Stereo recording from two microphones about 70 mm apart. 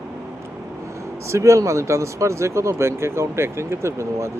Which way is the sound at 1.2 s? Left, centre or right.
Right.